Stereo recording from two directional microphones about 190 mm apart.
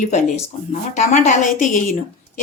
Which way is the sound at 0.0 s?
40° left (ahead or behind).